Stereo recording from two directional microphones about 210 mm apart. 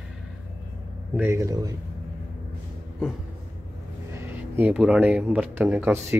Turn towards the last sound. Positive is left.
turn(degrees=-10)  # may be behind; listen again after turning